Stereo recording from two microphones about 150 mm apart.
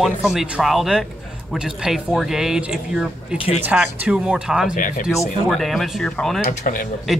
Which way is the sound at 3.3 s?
40° left (ahead or behind).